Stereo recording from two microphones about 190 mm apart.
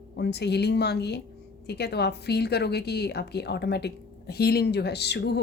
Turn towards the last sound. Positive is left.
turn(degrees=60)  # may be behind; listen again after turning